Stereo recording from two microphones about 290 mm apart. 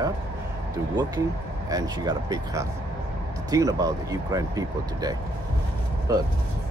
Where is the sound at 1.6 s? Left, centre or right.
Centre.